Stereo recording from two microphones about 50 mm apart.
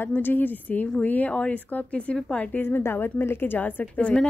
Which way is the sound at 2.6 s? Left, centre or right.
Left.